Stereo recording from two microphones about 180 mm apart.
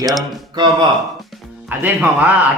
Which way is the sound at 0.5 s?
25° right (ahead or behind).